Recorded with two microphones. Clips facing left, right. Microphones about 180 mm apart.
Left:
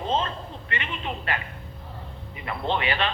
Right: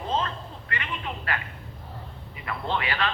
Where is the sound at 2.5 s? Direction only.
25° left (ahead or behind).